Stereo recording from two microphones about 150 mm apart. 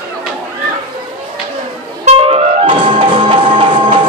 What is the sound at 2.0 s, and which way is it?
Music, 40° right (ahead or behind).